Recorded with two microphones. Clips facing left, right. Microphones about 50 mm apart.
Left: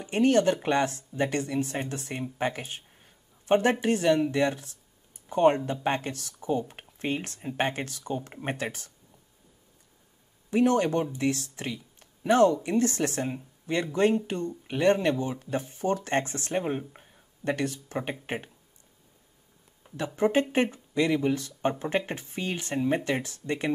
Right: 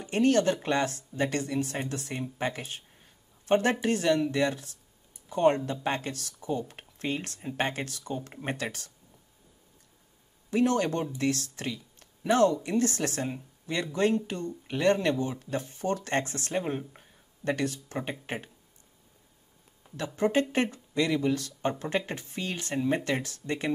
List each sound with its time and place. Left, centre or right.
0.0 s speech: left
10.5 s speech: left
16.6 s speech: centre
17.5 s speech: left
20.2 s speech: left